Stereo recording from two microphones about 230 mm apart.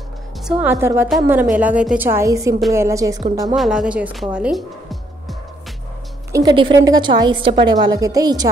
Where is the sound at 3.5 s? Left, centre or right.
Centre.